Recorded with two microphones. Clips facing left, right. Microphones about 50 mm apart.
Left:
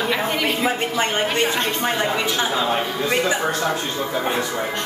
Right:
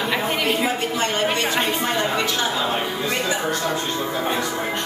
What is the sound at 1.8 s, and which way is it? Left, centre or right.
Speech, centre.